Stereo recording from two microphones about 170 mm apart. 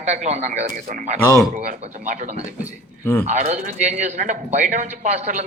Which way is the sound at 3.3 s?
40° right (ahead or behind).